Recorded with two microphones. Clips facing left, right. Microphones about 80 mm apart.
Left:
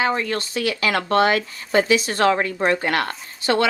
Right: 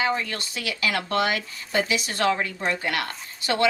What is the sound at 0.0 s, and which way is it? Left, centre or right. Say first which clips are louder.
A woman's voice: left 4 dB; left.